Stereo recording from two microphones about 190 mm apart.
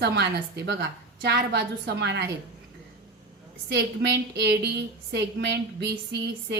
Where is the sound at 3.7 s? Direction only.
65° right (ahead or behind).